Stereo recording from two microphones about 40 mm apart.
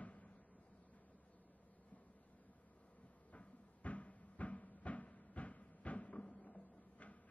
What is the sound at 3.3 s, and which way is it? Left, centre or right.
Cupboard open or close, left.